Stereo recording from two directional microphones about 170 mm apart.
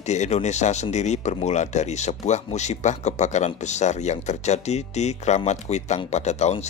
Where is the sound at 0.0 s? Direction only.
40° left (ahead or behind).